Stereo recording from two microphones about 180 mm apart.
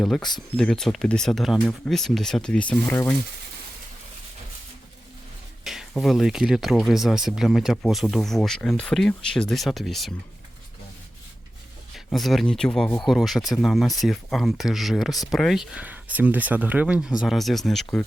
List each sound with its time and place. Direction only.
0.3 s speech: 5° left (ahead or behind)
5.6 s speech: centre (ahead or behind)
11.9 s speech: centre (ahead or behind)